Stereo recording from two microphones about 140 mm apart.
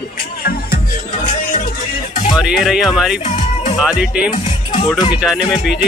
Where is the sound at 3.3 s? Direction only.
55° left (ahead or behind).